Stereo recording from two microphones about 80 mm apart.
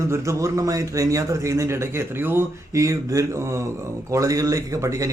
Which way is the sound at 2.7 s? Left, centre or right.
Right.